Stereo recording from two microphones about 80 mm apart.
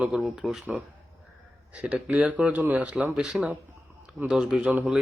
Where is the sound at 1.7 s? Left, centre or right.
Centre.